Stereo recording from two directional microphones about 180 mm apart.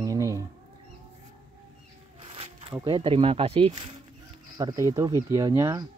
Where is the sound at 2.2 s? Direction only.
30° right (ahead or behind).